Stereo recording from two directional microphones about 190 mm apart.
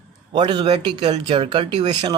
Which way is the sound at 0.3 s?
25° right (ahead or behind).